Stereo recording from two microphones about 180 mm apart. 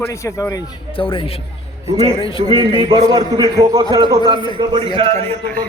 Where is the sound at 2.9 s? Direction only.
20° right (ahead or behind).